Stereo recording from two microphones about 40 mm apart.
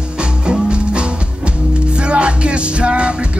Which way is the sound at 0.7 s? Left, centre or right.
Right.